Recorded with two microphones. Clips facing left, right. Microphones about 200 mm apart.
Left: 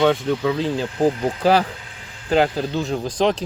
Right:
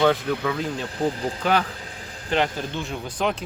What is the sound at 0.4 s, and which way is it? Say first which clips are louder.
Speech: left 5 dB; 25° left (ahead or behind).